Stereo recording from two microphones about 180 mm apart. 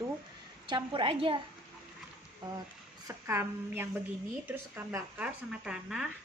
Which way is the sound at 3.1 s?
15° right (ahead or behind).